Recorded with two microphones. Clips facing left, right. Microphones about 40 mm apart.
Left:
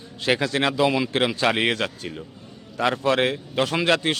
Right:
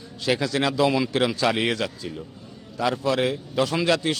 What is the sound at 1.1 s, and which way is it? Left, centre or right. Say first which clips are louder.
A man's voice: left 1 dB; left.